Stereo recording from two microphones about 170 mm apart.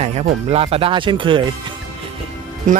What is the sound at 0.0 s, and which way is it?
Speech, 40° right (ahead or behind).